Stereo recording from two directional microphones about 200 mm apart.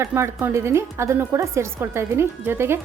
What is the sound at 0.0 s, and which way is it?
Speech, 15° right (ahead or behind).